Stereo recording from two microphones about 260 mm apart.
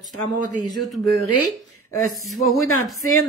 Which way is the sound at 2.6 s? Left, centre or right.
Left.